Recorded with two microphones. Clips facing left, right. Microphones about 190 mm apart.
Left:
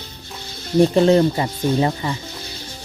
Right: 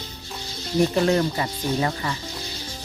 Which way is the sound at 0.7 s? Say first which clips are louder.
Left 6 dB; 30° left (ahead or behind).